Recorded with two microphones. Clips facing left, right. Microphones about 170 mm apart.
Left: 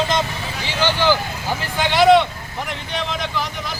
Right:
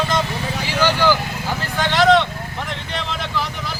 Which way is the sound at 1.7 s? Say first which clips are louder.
Left 2 dB; 15° left (ahead or behind).